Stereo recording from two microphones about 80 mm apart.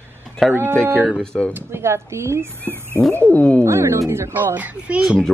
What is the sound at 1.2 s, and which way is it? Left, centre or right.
Speech, centre.